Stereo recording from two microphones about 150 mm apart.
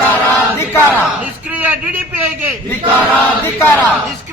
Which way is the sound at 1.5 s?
10° right (ahead or behind).